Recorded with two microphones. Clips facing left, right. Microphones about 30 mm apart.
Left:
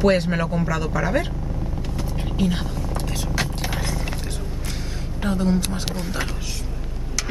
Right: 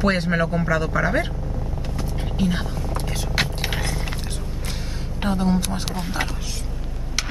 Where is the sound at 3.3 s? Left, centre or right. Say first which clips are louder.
Right 3 dB; right.